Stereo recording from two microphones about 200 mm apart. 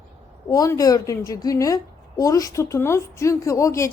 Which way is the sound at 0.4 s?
20° left (ahead or behind).